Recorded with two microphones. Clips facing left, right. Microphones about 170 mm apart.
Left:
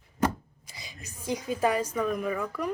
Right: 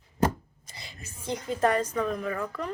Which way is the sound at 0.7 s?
15° left (ahead or behind).